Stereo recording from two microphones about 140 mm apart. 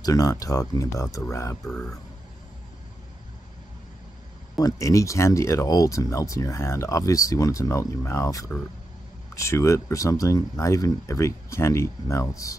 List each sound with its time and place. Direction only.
0.0 s speech: 25° left (ahead or behind)
1.7 s speech: 5° left (ahead or behind)
4.6 s speech: 25° left (ahead or behind)